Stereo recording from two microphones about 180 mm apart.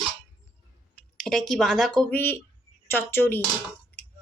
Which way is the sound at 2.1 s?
10° left (ahead or behind).